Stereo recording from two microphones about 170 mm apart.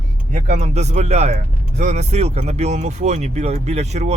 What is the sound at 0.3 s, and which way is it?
Speech, 50° right (ahead or behind).